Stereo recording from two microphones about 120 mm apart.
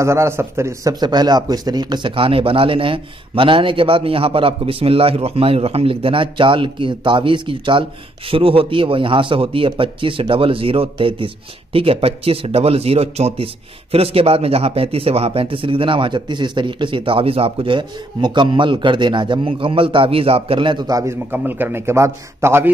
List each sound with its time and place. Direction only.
0.0 s speech: 25° right (ahead or behind)